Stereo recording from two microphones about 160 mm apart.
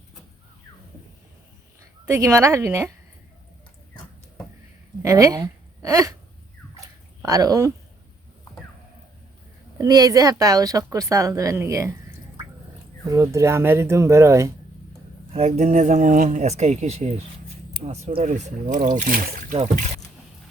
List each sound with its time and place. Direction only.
2.0 s speech: 20° right (ahead or behind)
5.0 s speech: 20° right (ahead or behind)
7.2 s speech: 20° right (ahead or behind)
9.7 s speech: 25° right (ahead or behind)
13.1 s speech: 20° right (ahead or behind)
15.3 s speech: 45° right (ahead or behind); by 19.5 s 60° right (ahead or behind)